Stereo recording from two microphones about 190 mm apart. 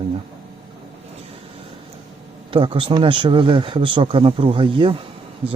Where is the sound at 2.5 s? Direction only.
25° right (ahead or behind).